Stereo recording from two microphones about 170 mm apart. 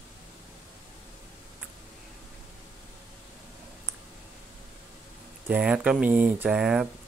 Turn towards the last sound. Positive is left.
turn(degrees=-5)  # may be behind; listen again after turning